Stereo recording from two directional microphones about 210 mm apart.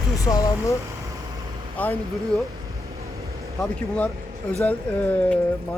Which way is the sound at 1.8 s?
10° left (ahead or behind).